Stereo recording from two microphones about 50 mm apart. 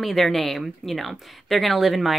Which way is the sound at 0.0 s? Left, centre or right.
Centre.